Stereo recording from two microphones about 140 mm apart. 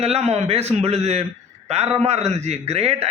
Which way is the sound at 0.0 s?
50° right (ahead or behind).